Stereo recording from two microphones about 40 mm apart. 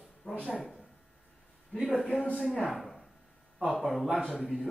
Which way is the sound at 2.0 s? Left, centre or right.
Left.